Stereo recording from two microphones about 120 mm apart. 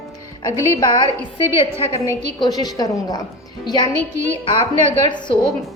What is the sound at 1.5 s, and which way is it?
Speech, 55° left (ahead or behind).